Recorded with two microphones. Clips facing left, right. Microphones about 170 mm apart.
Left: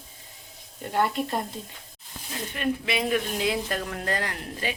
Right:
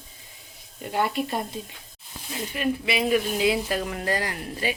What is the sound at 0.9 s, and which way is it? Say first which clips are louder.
Speech: even; 5° right (ahead or behind).